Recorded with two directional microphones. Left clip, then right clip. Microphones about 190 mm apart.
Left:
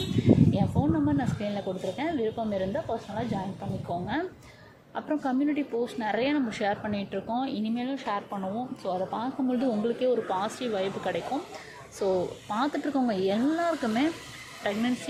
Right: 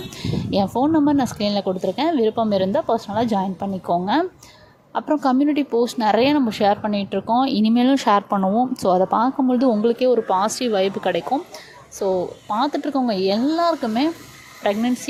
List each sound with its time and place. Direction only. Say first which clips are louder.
0.5 s speech: right 10 dB; 30° right (ahead or behind)
9.5 s speech: right 10 dB; 25° right (ahead or behind)
11.9 s speech: right 6 dB; 15° right (ahead or behind)